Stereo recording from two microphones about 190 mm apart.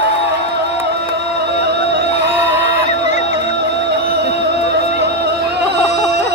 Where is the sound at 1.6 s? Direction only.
60° right (ahead or behind).